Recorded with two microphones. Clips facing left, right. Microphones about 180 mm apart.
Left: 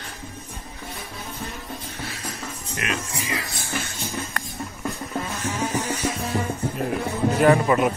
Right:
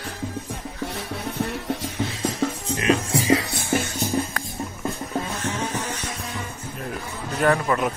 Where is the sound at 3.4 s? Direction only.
60° right (ahead or behind).